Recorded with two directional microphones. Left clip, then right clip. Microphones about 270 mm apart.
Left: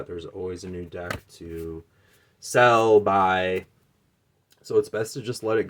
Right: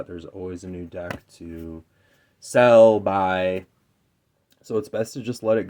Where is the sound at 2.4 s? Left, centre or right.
Right.